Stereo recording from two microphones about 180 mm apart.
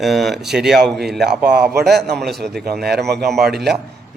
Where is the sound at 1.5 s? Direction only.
70° right (ahead or behind).